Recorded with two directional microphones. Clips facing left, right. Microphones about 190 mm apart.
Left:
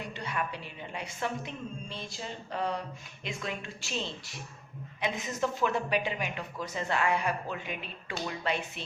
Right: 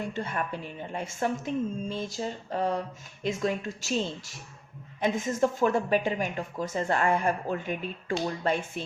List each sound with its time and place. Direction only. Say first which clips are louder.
0.0 s speech: right 4 dB; 45° right (ahead or behind)